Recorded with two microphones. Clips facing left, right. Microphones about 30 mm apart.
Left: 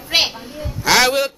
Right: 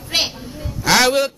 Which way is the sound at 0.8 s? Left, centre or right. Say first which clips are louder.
Even; centre.